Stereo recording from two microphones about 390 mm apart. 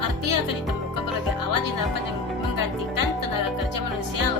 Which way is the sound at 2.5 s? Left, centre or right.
Left.